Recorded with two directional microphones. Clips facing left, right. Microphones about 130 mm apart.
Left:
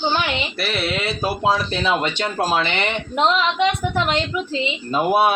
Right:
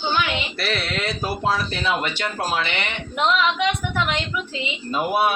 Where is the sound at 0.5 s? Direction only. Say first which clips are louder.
Left 2 dB; 5° left (ahead or behind); by 4.2 s 35° left (ahead or behind).